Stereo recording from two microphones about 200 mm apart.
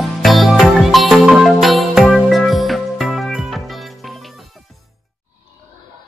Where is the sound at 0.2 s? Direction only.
Centre (ahead or behind).